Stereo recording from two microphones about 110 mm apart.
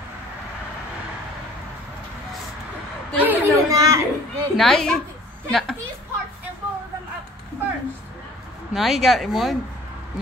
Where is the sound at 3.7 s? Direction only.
30° right (ahead or behind).